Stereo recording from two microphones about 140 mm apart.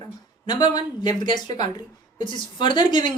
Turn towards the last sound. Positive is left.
turn(degrees=35)  # may be behind; listen again after turning